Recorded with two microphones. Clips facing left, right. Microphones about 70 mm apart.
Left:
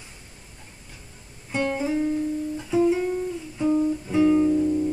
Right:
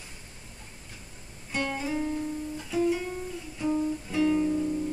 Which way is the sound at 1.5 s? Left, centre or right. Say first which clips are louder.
Left 6 dB; centre.